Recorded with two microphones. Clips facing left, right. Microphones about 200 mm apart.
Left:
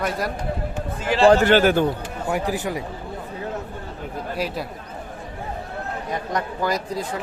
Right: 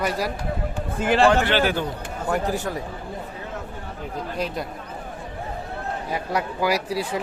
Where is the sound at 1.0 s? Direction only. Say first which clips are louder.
Right 3 dB; 55° right (ahead or behind).